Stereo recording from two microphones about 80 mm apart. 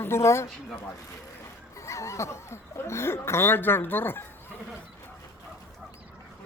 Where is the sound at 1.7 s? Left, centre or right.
Left.